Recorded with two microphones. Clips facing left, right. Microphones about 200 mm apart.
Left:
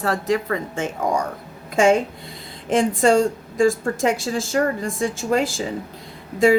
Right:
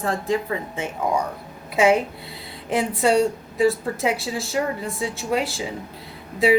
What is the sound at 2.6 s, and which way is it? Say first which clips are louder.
Speech: left 4 dB; 90° left.